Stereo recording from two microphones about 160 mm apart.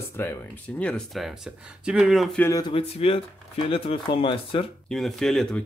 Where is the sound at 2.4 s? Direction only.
20° left (ahead or behind).